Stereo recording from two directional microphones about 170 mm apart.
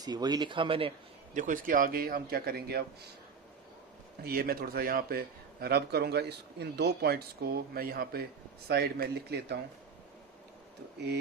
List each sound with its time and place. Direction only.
0.0 s speech: 25° right (ahead or behind)
1.3 s a man's voice: 50° right (ahead or behind); by 2.8 s 65° right (ahead or behind)
4.2 s speech: 60° right (ahead or behind)